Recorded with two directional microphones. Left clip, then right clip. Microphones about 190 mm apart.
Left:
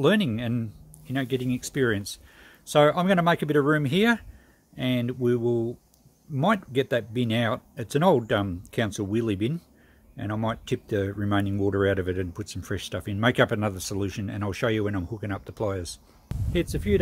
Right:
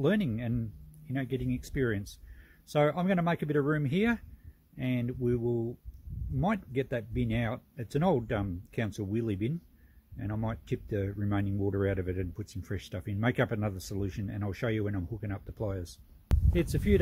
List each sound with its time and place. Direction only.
0.0 s speech: centre (ahead or behind)